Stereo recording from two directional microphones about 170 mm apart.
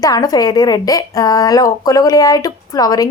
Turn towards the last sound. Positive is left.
turn(degrees=20)  # may be behind; listen again after turning